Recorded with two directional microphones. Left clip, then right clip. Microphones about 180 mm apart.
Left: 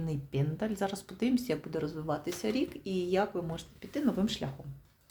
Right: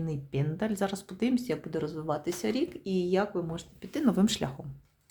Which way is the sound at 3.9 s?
35° right (ahead or behind).